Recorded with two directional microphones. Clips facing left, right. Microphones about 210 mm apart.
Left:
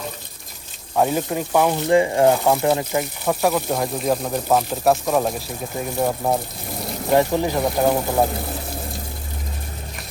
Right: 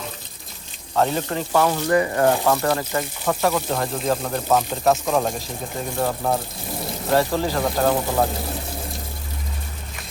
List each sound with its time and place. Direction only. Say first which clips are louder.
0.9 s speech: left 2 dB; 10° left (ahead or behind)